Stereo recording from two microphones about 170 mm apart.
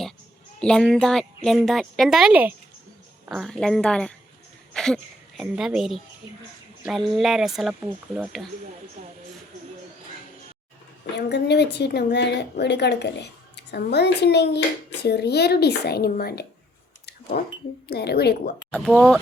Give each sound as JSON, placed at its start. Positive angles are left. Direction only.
{"t": 0.6, "sound": "a woman's voice", "side_deg": 5}
{"t": 4.7, "sound": "a sound", "side_deg": 5}
{"t": 5.4, "sound": "a woman's voice", "side_deg": -5}
{"t": 11.0, "sound": "a woman's voice", "side_deg": 90}
{"t": 18.7, "sound": "a woman's voice", "side_deg": 5}